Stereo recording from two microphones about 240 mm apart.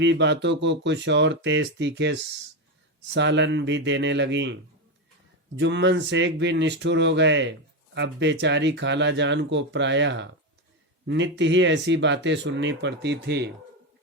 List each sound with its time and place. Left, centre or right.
0.0 s speech: right
3.2 s speech: right
5.5 s speech: right